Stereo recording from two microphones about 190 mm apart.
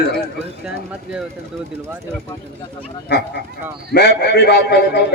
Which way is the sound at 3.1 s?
65° left (ahead or behind).